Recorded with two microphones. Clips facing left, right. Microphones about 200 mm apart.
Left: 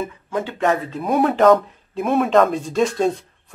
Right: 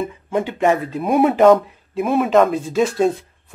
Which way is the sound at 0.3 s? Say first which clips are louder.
Right 3 dB; 15° right (ahead or behind).